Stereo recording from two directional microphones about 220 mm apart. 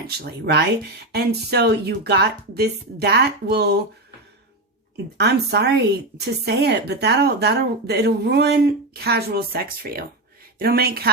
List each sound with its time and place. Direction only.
0.2 s speech: 45° right (ahead or behind)
5.1 s speech: 50° right (ahead or behind)